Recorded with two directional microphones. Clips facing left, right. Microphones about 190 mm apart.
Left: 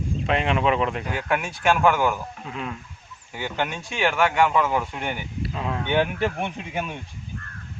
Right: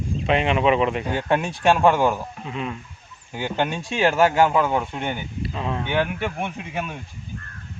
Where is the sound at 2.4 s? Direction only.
Centre (ahead or behind).